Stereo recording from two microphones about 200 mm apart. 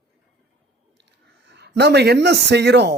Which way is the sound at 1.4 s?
60° right (ahead or behind).